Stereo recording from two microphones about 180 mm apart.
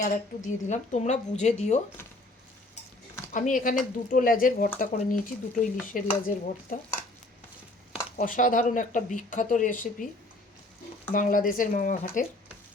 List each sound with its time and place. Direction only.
0.0 s speech: 40° left (ahead or behind)
3.3 s speech: 45° left (ahead or behind)
8.2 s speech: 50° left (ahead or behind)
11.1 s speech: 50° left (ahead or behind)